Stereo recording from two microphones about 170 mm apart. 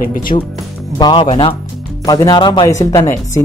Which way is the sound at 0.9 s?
25° left (ahead or behind).